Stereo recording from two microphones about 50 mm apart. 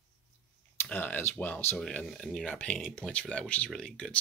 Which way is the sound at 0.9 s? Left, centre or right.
Left.